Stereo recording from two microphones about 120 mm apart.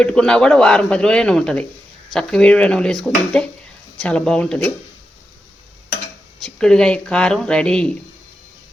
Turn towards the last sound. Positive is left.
turn(degrees=5)  # may be behind; listen again after turning